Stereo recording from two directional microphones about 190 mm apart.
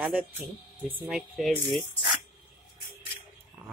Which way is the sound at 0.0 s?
10° right (ahead or behind).